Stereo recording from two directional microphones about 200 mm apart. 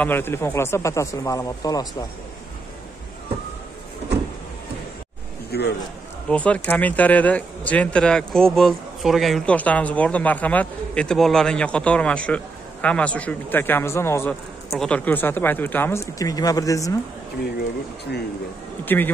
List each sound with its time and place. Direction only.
0.0 s speech: 10° left (ahead or behind)
5.5 s a man's voice: 55° left (ahead or behind)
6.2 s speech: 5° left (ahead or behind)
18.9 s speech: 10° left (ahead or behind)